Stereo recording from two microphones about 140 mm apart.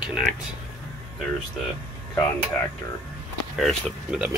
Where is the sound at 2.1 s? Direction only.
15° left (ahead or behind).